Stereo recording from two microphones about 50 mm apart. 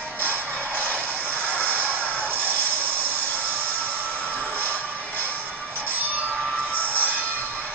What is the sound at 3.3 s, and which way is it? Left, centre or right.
Vehicle, left.